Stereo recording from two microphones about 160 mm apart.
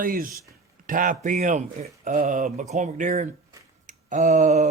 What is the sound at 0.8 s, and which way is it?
A man's voice, 55° right (ahead or behind).